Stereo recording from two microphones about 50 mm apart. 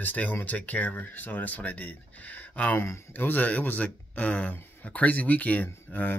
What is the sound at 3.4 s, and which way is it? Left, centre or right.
Speech, left.